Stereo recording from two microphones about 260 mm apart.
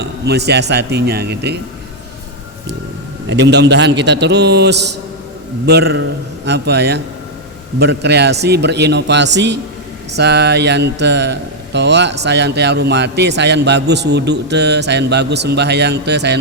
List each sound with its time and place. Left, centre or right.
0.0 s mantra: right
3.2 s mantra: right